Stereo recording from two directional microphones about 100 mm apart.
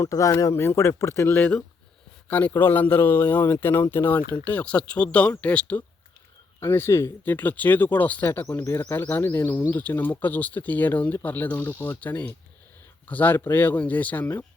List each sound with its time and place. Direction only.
0.0 s speech: 35° left (ahead or behind); by 5.8 s 15° left (ahead or behind)
6.6 s speech: 25° left (ahead or behind)